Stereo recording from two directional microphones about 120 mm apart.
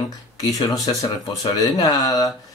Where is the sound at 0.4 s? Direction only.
35° left (ahead or behind).